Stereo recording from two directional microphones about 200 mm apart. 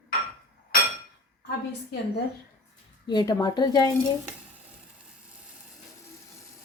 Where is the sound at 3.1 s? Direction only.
20° left (ahead or behind).